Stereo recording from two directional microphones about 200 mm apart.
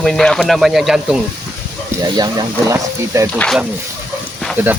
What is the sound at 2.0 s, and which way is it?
Speech, 20° right (ahead or behind).